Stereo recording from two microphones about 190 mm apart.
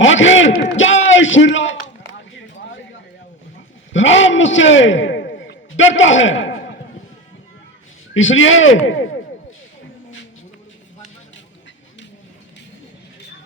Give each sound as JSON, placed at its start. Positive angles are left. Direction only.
{"t": 0.0, "sound": "a man's voice", "side_deg": 85}
{"t": 3.9, "sound": "a man's voice", "side_deg": 80}
{"t": 8.1, "sound": "speech", "side_deg": 90}